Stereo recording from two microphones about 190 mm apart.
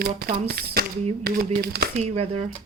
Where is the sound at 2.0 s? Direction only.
35° right (ahead or behind).